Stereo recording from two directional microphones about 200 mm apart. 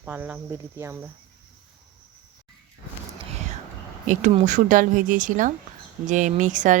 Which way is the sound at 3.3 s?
35° right (ahead or behind).